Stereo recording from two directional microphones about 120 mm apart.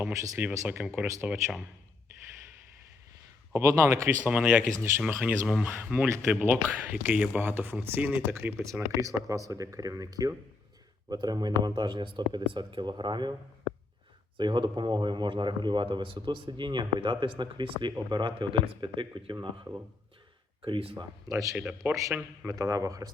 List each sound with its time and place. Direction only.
0.0 s speech: 10° right (ahead or behind)
3.5 s speech: 25° right (ahead or behind)
8.6 s speech: 25° right (ahead or behind)
14.3 s speech: 40° right (ahead or behind)
20.7 s speech: 50° right (ahead or behind)
21.0 s speech: 30° right (ahead or behind)
21.5 s speech: 10° right (ahead or behind)
22.4 s speech: 25° right (ahead or behind)